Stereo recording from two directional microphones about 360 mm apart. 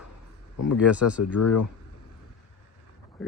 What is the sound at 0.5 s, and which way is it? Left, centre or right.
Speech, left.